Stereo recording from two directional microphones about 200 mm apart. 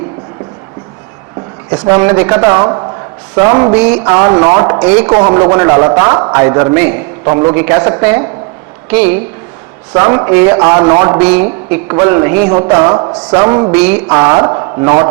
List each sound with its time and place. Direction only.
1.7 s speech: 15° right (ahead or behind)
13.7 s speech: 10° right (ahead or behind)